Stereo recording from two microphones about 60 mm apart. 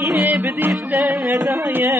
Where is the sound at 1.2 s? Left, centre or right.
Right.